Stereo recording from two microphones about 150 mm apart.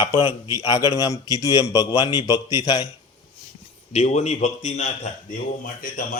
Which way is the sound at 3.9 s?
50° left (ahead or behind).